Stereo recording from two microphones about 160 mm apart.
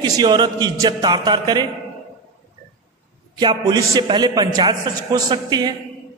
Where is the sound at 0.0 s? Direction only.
25° right (ahead or behind).